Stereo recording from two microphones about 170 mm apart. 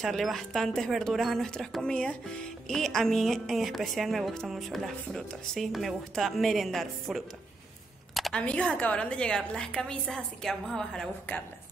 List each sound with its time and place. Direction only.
0.0 s speech: centre (ahead or behind)